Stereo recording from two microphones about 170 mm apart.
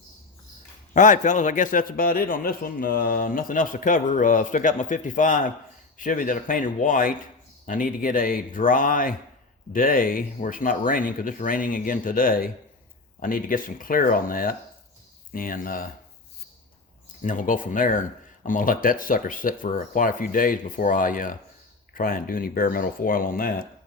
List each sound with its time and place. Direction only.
0.9 s a man's voice: 50° left (ahead or behind)
17.2 s a man's voice: 50° left (ahead or behind)